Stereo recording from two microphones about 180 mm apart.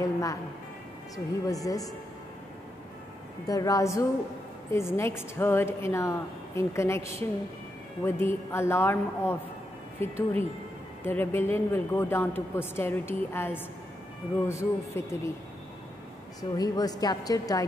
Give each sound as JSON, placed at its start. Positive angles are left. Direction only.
{"t": 0.0, "sound": "a woman's voice", "side_deg": 20}
{"t": 3.4, "sound": "a woman's voice", "side_deg": 20}
{"t": 16.3, "sound": "a woman's voice", "side_deg": 20}